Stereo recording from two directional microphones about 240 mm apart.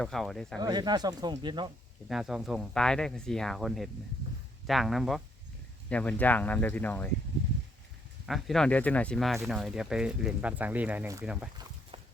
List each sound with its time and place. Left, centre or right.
0.0 s speech: centre
0.6 s speech: centre
2.0 s speech: centre
8.3 s speech: centre